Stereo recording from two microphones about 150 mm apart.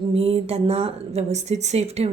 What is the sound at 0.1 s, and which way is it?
A woman's voice, 40° right (ahead or behind).